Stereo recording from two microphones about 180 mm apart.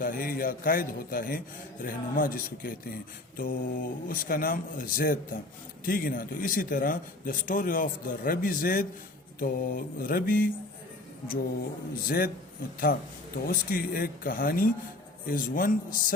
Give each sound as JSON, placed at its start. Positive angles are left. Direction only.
{"t": 0.0, "sound": "speech", "side_deg": 50}
{"t": 12.0, "sound": "speech", "side_deg": 55}
{"t": 13.5, "sound": "speech", "side_deg": 55}